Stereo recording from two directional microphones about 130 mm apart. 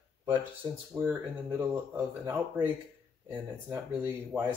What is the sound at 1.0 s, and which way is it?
Speech, 15° right (ahead or behind).